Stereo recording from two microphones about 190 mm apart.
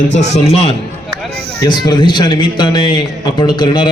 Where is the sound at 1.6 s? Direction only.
20° left (ahead or behind).